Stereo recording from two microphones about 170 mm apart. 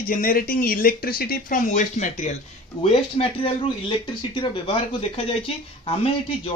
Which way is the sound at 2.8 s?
35° left (ahead or behind).